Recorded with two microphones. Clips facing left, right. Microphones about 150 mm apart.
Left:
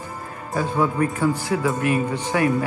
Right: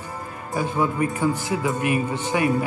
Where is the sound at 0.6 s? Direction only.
15° right (ahead or behind).